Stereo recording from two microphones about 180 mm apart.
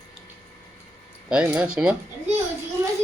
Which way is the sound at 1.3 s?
5° right (ahead or behind).